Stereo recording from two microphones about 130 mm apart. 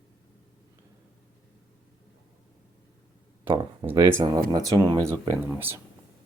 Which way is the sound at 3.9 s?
20° right (ahead or behind).